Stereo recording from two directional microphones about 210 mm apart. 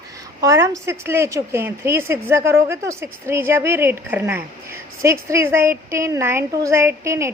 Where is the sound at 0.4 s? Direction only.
15° right (ahead or behind).